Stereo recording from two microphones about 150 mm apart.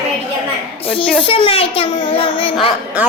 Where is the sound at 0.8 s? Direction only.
40° left (ahead or behind).